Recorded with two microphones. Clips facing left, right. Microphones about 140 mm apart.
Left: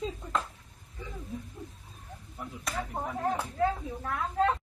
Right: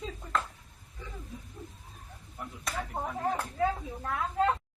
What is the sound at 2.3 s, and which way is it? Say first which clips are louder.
Speech: left 1 dB; centre (ahead or behind).